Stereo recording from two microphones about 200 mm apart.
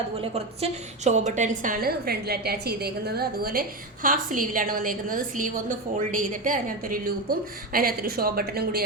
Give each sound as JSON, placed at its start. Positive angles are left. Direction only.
{"t": 0.2, "sound": "a woman's voice", "side_deg": -30}